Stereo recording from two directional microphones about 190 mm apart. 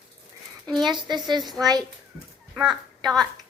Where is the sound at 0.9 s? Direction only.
25° right (ahead or behind).